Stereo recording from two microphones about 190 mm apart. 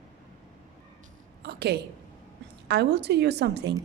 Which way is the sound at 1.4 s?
60° right (ahead or behind).